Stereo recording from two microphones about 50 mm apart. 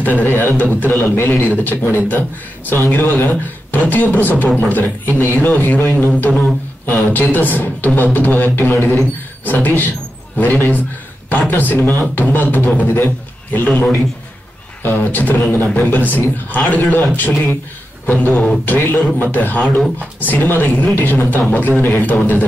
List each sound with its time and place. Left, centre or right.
0.0 s speech: left
12.8 s a man's voice: left
13.7 s a man's voice: left
14.8 s speech: left
18.3 s a man's voice: centre
18.7 s speech: left
18.9 s speech: left